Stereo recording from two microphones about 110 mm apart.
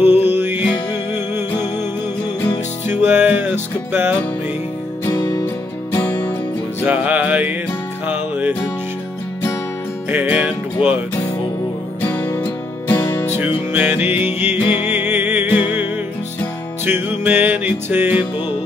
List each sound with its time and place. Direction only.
0.0 s music: 20° right (ahead or behind)
2.9 s music: 20° right (ahead or behind)
5.0 s music: 35° left (ahead or behind)
5.4 s music: 20° left (ahead or behind)
6.8 s music: 15° right (ahead or behind)
10.0 s music: 15° right (ahead or behind)
12.0 s music: 20° left (ahead or behind)
13.4 s music: 15° right (ahead or behind)